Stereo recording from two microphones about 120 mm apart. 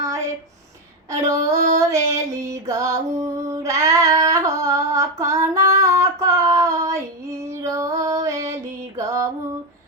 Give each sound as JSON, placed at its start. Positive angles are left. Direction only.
{"t": 1.1, "sound": "female singing", "side_deg": -25}
{"t": 1.8, "sound": "music", "side_deg": -25}